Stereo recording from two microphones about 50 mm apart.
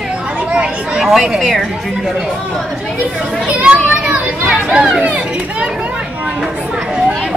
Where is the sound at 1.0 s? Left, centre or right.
Centre.